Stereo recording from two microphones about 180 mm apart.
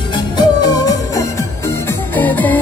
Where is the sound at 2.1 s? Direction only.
10° left (ahead or behind).